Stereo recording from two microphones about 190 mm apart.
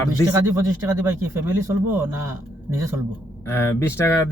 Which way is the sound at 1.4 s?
10° right (ahead or behind).